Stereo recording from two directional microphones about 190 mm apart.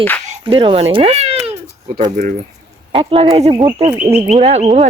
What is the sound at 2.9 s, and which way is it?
Speech, 30° right (ahead or behind).